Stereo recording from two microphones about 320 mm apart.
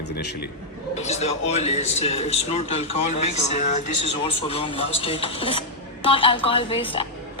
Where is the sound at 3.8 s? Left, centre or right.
Left.